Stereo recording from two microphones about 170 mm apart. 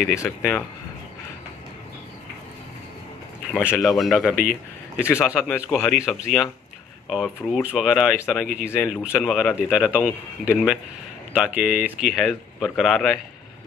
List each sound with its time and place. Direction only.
0.1 s speech: 15° left (ahead or behind)
3.5 s speech: 15° left (ahead or behind)
3.8 s speech: centre (ahead or behind)
4.4 s a sound: 55° left (ahead or behind)
5.5 s speech: centre (ahead or behind)